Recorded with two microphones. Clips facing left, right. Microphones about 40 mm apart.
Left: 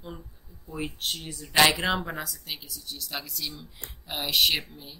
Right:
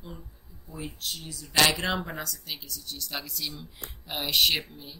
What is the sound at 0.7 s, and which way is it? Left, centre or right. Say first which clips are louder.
Speech: left 4 dB; left.